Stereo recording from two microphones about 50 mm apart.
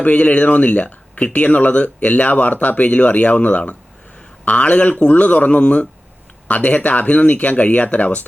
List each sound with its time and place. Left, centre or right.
0.0 s speech: left